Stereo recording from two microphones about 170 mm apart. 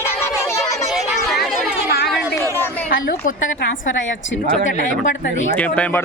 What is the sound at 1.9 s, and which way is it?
Chatter, 70° left (ahead or behind).